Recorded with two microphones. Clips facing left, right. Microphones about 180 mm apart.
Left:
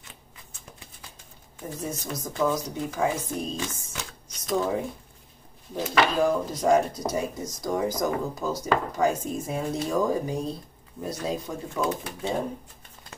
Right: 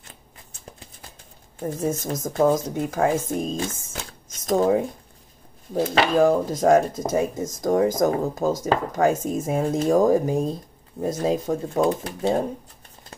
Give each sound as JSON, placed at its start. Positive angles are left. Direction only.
{"t": 1.6, "sound": "speech", "side_deg": -45}
{"t": 3.9, "sound": "a sound", "side_deg": -45}
{"t": 5.8, "sound": "speech", "side_deg": -50}